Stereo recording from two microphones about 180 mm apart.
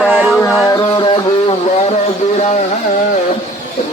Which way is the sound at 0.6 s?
20° left (ahead or behind).